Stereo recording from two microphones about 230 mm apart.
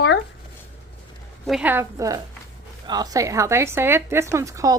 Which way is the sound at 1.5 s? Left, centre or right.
Centre.